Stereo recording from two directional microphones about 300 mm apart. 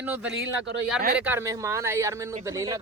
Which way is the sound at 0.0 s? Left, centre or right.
Centre.